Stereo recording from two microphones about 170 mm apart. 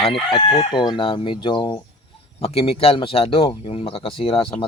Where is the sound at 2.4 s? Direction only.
35° left (ahead or behind).